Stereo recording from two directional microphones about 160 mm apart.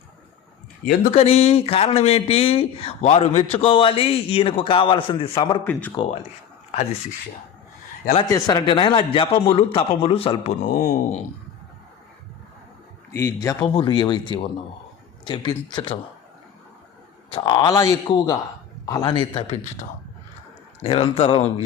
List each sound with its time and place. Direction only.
1.1 s a man's voice: 40° left (ahead or behind)
8.3 s speech: 25° left (ahead or behind)
10.7 s speech: 60° left (ahead or behind)
13.1 s speech: 20° left (ahead or behind)
13.7 s a man's voice: 30° left (ahead or behind)
17.3 s a man's voice: 25° left (ahead or behind)
20.8 s speech: 35° left (ahead or behind)